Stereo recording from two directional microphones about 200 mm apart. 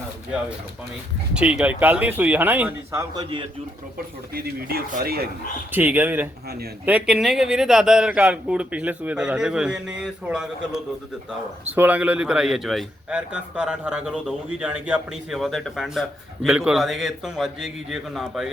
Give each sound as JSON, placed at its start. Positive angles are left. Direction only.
{"t": 1.3, "sound": "a man's voice", "side_deg": -5}
{"t": 4.4, "sound": "speech", "side_deg": -50}
{"t": 5.7, "sound": "a man's voice", "side_deg": -10}